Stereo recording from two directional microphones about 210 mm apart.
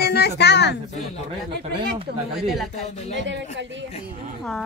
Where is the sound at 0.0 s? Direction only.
50° left (ahead or behind).